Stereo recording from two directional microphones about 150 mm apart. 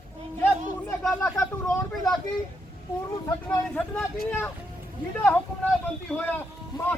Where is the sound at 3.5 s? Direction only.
10° left (ahead or behind).